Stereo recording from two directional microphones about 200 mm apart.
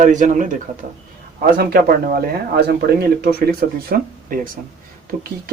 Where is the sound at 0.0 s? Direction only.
40° right (ahead or behind).